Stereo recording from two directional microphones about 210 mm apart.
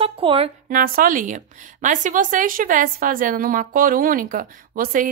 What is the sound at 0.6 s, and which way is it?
A woman's voice, 45° right (ahead or behind).